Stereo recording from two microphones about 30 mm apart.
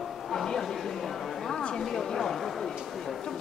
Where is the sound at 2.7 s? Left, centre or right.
Centre.